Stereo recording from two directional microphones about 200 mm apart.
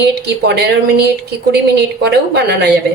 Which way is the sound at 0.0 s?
55° right (ahead or behind).